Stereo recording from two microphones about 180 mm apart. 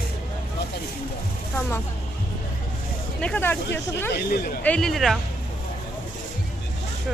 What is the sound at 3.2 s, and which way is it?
Speech, 5° left (ahead or behind).